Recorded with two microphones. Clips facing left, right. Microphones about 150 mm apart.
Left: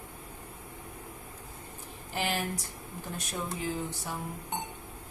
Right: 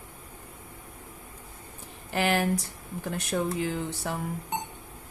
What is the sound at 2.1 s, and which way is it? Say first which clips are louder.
Speech: right 7 dB; 70° right (ahead or behind).